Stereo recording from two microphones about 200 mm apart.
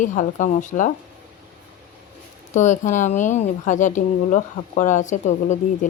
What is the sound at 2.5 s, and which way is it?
Speech, 35° left (ahead or behind).